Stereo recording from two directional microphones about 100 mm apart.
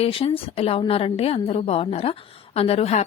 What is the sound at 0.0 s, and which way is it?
A woman's voice, 75° left (ahead or behind).